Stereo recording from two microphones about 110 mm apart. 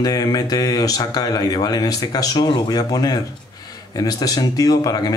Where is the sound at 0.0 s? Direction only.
35° left (ahead or behind).